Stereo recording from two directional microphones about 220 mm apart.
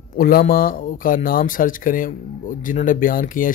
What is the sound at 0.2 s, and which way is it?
Speech, 40° left (ahead or behind).